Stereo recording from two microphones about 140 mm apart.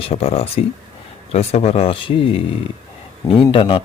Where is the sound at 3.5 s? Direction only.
40° left (ahead or behind).